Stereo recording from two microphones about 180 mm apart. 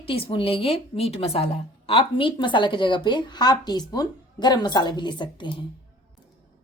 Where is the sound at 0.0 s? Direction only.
30° left (ahead or behind).